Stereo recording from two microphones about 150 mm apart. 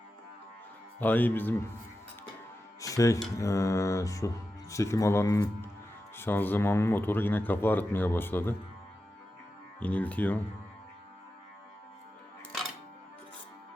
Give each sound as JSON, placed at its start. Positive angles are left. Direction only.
{"t": 0.9, "sound": "speech", "side_deg": 10}
{"t": 2.8, "sound": "music", "side_deg": 20}
{"t": 3.3, "sound": "mantra", "side_deg": 20}
{"t": 6.1, "sound": "speech", "side_deg": 15}
{"t": 9.8, "sound": "speech", "side_deg": 10}